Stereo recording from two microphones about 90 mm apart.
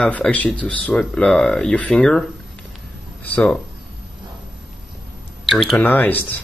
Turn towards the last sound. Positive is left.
turn(degrees=20)  # may be behind; listen again after turning